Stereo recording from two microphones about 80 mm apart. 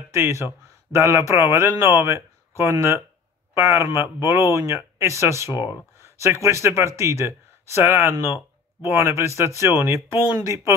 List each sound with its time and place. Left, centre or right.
0.1 s speech: right